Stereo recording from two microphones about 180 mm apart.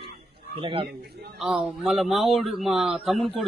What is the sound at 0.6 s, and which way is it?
Speech, 30° right (ahead or behind).